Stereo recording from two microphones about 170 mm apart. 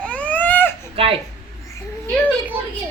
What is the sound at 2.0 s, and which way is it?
Children playing, 15° right (ahead or behind).